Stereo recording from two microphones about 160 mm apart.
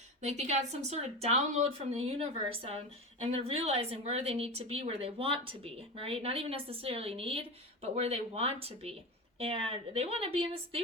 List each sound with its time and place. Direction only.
0.2 s speech: 45° right (ahead or behind)